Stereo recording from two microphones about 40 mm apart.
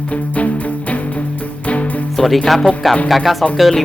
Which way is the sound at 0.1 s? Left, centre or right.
Left.